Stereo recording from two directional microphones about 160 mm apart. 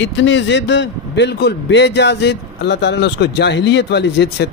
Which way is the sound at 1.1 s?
90° left.